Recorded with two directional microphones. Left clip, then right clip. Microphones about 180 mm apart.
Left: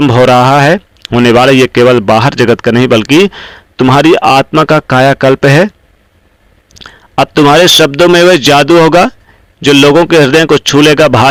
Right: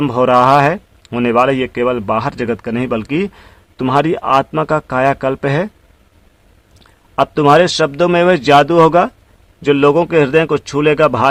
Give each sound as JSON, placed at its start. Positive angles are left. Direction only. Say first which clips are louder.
{"t": 0.0, "sound": "speech", "louder": "left 6 dB", "side_deg": 30}
{"t": 6.7, "sound": "speech", "louder": "left 5 dB", "side_deg": 30}